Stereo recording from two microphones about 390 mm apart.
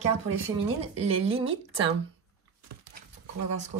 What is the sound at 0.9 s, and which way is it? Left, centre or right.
Speech, centre.